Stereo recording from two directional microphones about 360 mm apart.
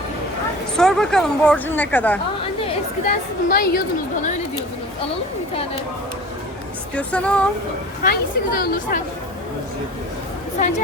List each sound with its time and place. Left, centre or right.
0.8 s speech: centre
2.6 s a woman's voice: left
6.9 s speech: centre
8.0 s a woman's voice: left